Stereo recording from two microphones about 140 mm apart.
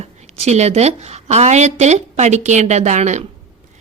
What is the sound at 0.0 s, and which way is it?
Speech, 50° right (ahead or behind).